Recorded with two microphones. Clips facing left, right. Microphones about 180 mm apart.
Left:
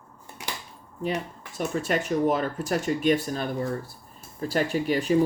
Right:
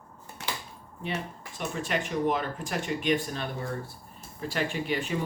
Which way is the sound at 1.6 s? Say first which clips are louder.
Left 5 dB; 45° left (ahead or behind).